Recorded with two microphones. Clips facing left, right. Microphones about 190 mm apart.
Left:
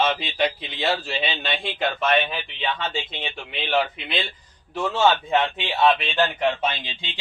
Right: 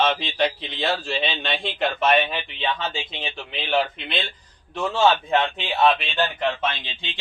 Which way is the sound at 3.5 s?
Centre (ahead or behind).